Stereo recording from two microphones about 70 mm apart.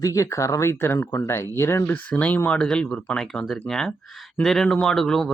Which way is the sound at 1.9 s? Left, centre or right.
Centre.